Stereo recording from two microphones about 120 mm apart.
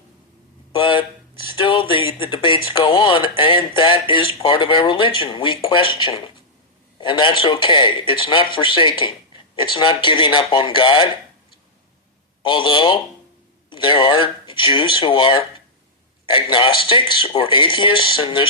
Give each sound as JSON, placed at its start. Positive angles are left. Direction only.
{"t": 0.7, "sound": "speech", "side_deg": 45}
{"t": 12.4, "sound": "speech", "side_deg": 45}